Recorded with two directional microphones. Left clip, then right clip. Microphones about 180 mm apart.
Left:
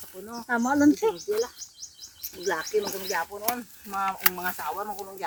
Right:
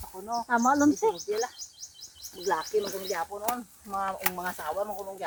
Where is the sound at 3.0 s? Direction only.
35° left (ahead or behind).